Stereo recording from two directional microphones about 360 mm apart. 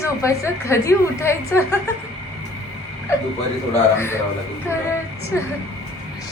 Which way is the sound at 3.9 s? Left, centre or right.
Centre.